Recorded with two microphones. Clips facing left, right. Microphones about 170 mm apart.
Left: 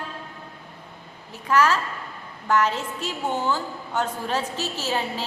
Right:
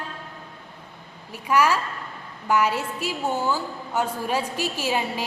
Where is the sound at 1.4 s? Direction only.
10° right (ahead or behind).